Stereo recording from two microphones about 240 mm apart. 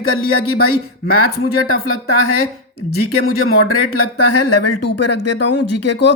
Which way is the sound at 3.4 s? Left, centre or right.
Left.